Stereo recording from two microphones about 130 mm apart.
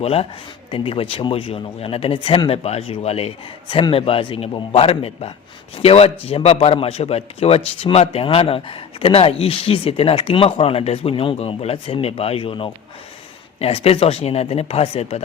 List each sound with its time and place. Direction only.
0.0 s a man's voice: 50° left (ahead or behind)